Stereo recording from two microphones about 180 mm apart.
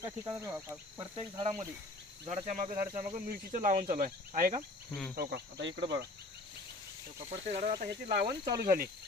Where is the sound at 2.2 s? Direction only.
40° right (ahead or behind).